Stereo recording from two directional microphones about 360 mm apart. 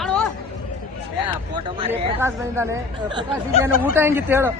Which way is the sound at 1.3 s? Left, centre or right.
Centre.